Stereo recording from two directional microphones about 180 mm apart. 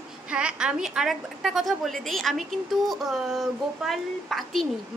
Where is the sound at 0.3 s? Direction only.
5° right (ahead or behind).